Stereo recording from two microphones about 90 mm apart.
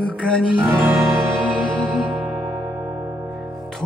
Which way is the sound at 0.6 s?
20° right (ahead or behind).